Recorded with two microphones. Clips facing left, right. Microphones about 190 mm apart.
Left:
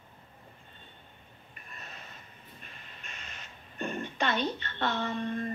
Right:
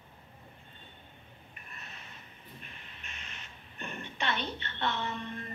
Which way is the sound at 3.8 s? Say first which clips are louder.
Left 6 dB; 40° left (ahead or behind).